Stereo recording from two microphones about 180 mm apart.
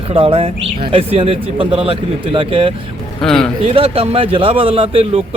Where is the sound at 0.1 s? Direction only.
30° right (ahead or behind).